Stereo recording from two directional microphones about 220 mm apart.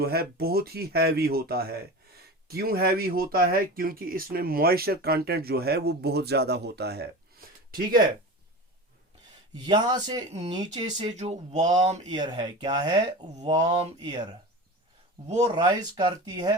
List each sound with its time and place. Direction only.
0.0 s speech: 45° right (ahead or behind)
9.6 s speech: 20° right (ahead or behind)
10.9 s speech: 30° right (ahead or behind)
12.0 s speech: 20° right (ahead or behind)
13.6 s speech: 30° right (ahead or behind)
14.0 s speech: 20° right (ahead or behind)
15.4 s speech: 20° right (ahead or behind)